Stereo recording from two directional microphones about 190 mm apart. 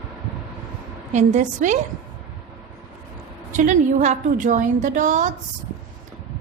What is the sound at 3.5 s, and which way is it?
A woman's voice, 40° right (ahead or behind).